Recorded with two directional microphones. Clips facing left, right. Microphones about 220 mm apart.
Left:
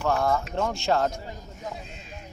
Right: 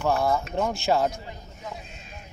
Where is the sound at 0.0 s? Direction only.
10° right (ahead or behind).